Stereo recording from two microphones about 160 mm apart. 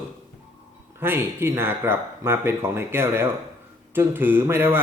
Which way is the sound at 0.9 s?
15° right (ahead or behind).